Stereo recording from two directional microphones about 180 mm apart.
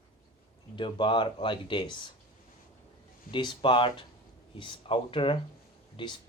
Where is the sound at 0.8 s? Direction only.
25° left (ahead or behind).